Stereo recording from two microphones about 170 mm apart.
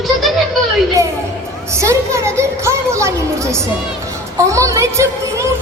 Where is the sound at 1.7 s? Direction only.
15° right (ahead or behind).